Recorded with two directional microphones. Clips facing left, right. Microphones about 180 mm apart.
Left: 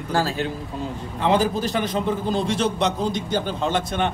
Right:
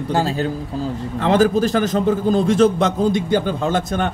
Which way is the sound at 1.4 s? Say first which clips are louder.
Right 7 dB; 45° right (ahead or behind).